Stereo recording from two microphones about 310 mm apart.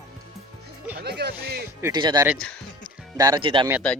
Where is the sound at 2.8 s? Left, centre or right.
Centre.